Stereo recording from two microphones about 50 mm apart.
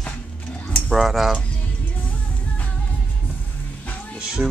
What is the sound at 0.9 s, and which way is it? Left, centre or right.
Speech, centre.